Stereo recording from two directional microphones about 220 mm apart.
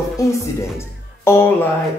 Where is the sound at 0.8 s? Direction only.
10° left (ahead or behind).